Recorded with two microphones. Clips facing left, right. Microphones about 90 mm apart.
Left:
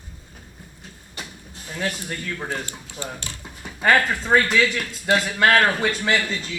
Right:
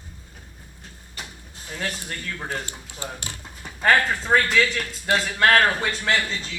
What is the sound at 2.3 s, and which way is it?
Speech, 20° left (ahead or behind).